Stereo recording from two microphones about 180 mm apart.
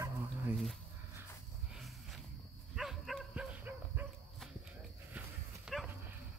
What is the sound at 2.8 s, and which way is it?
Dog, centre (ahead or behind).